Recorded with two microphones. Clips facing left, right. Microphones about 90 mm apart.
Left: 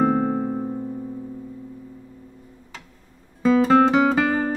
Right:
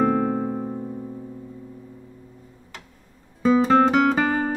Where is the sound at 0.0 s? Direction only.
10° left (ahead or behind).